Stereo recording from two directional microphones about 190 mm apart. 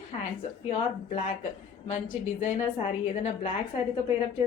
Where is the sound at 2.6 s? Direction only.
35° left (ahead or behind).